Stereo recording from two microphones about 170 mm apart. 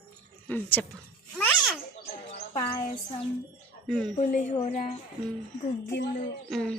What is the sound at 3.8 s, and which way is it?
Speech, centre (ahead or behind).